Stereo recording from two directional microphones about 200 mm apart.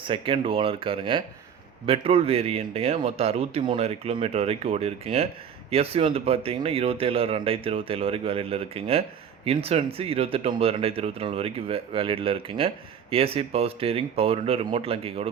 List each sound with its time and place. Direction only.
0.0 s a man's voice: 25° right (ahead or behind)